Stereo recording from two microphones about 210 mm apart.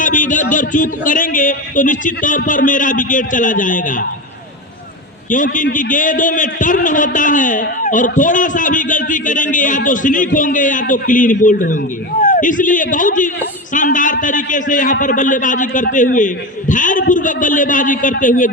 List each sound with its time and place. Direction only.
0.0 s a sound: 40° left (ahead or behind)
0.5 s a man's voice: 40° left (ahead or behind)
5.3 s a man's voice: 40° left (ahead or behind)